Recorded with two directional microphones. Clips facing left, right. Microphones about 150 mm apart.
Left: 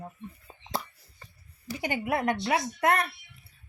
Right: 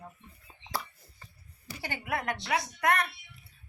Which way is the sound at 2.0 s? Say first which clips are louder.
Left 5 dB; 25° left (ahead or behind).